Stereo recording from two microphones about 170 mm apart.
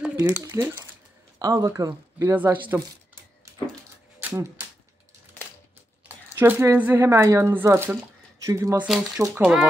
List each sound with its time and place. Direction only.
0.2 s speech: 15° right (ahead or behind)
4.2 s typewriter: 10° right (ahead or behind)
6.0 s speech: 15° right (ahead or behind)
8.8 s speech: centre (ahead or behind)